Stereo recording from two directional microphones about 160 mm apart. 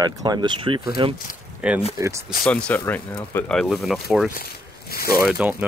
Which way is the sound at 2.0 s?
20° right (ahead or behind).